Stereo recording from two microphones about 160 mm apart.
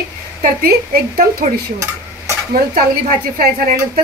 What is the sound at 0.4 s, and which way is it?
Speech, 65° right (ahead or behind).